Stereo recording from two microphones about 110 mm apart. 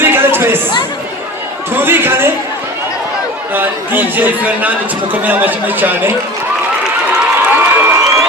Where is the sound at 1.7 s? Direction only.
20° right (ahead or behind).